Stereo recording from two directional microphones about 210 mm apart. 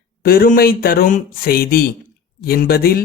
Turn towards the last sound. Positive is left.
turn(degrees=45)  # may be behind; listen again after turning